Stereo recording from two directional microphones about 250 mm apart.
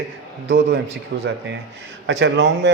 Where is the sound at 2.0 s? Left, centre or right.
Right.